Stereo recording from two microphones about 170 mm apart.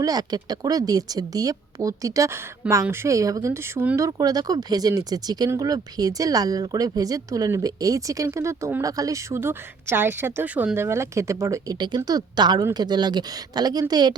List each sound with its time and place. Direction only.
0.0 s speech: 25° right (ahead or behind)